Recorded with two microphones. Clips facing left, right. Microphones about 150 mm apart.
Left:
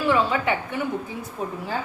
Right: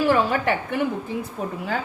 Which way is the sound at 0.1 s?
45° right (ahead or behind).